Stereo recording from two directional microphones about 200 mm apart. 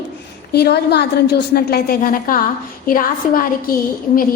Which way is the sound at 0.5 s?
55° left (ahead or behind).